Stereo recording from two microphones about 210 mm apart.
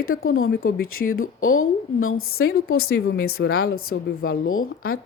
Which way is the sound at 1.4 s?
75° left (ahead or behind).